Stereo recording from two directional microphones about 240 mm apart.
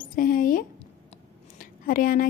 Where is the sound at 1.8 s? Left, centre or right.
Left.